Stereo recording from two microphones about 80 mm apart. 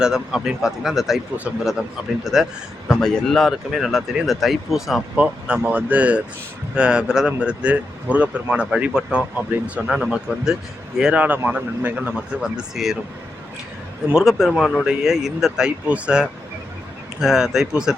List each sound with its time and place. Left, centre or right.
0.0 s speech: centre
2.2 s speech: centre
2.9 s speech: centre
5.1 s speech: centre
9.8 s speech: centre; by 12.1 s right
12.1 s speech: centre
14.2 s speech: centre